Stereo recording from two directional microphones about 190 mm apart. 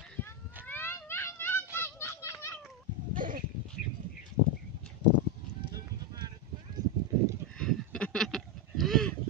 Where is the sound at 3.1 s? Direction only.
45° right (ahead or behind).